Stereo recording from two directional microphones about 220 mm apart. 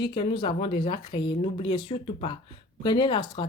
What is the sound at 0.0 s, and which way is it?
Speech, 20° left (ahead or behind).